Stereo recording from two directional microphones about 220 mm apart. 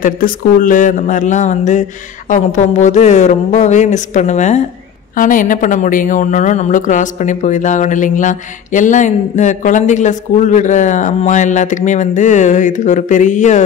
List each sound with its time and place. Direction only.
0.0 s a woman's voice: 40° left (ahead or behind)